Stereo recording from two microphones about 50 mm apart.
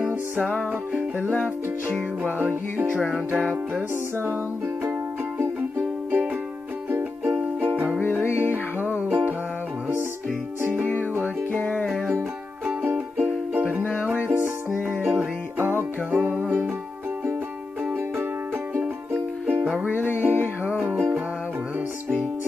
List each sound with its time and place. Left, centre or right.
0.7 s music: right
3.9 s music: right
5.6 s music: right
11.5 s music: left
12.1 s music: right
16.1 s music: right
19.4 s music: right